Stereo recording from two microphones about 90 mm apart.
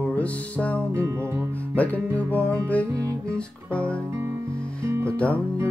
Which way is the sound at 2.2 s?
15° left (ahead or behind).